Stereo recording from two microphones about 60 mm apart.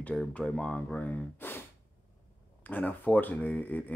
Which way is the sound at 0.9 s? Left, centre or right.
Left.